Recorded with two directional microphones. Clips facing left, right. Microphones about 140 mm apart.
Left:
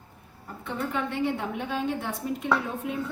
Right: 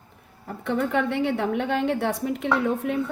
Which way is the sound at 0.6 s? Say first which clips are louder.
Right 7 dB; 70° right (ahead or behind).